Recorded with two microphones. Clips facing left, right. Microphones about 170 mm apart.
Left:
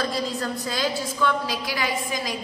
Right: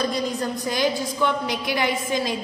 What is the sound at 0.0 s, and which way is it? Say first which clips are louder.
A woman's voice: right 2 dB; 20° right (ahead or behind).